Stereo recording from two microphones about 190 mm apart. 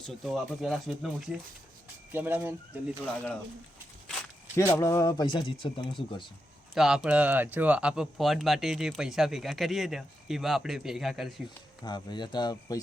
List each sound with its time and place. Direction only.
0.0 s speech: centre (ahead or behind)
4.8 s speech: 15° left (ahead or behind)
6.7 s speech: 5° right (ahead or behind)
11.4 s speech: 25° left (ahead or behind)